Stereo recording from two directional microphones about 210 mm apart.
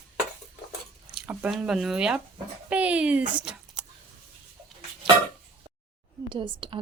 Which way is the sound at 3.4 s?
5° right (ahead or behind).